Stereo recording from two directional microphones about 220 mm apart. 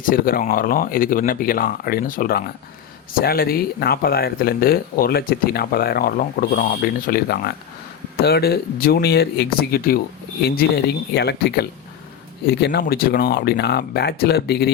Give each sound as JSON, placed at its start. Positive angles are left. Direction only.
{"t": 0.0, "sound": "speech", "side_deg": 40}